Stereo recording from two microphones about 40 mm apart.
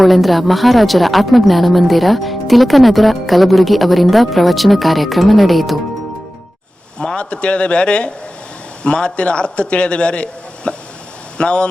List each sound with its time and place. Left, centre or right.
0.0 s a woman's voice: centre
7.0 s a man's voice: left